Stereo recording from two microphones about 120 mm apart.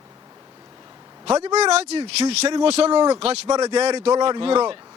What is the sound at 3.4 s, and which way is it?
Speech, 30° right (ahead or behind).